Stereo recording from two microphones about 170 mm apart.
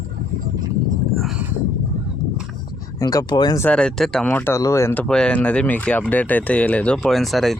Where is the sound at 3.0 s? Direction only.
25° left (ahead or behind).